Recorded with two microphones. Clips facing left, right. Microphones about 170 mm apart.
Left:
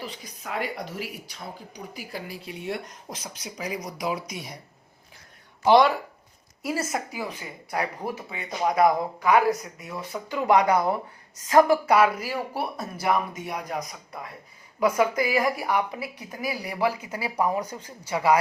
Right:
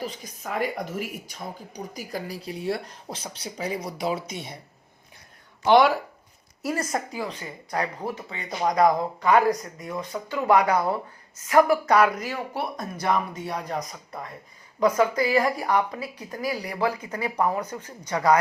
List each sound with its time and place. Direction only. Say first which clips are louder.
0.0 s speech: right 4 dB; 45° right (ahead or behind); by 4.6 s 25° right (ahead or behind)
5.6 s speech: even; centre (ahead or behind); by 10.8 s 15° left (ahead or behind)
11.9 s speech: even; 5° left (ahead or behind)